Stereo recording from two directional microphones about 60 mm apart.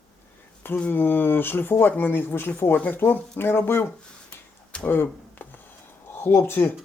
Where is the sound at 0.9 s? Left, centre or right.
Left.